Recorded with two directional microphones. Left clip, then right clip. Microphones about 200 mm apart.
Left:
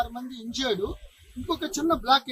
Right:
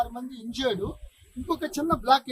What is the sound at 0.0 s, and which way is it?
Speech, 25° right (ahead or behind).